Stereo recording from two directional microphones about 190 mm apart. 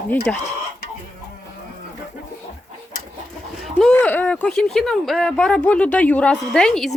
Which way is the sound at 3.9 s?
10° left (ahead or behind).